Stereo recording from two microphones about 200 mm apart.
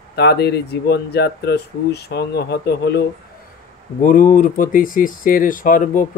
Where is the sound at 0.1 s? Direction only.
55° left (ahead or behind).